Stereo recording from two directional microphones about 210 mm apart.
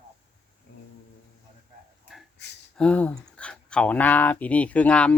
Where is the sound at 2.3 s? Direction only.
55° left (ahead or behind).